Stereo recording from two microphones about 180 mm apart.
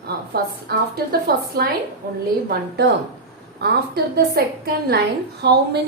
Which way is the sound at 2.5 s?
65° right (ahead or behind).